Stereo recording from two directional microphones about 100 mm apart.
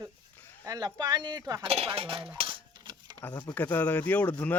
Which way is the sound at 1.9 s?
60° right (ahead or behind).